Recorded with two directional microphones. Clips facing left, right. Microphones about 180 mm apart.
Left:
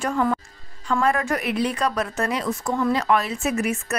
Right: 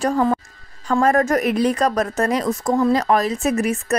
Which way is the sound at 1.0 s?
40° right (ahead or behind).